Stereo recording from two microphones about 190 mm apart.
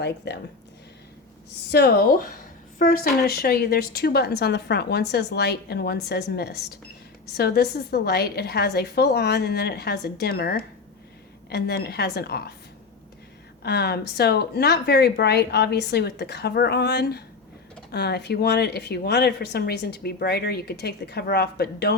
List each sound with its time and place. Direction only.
0.2 s speech: 65° left (ahead or behind)
1.7 s a woman's voice: 55° left (ahead or behind)
13.6 s speech: 60° left (ahead or behind)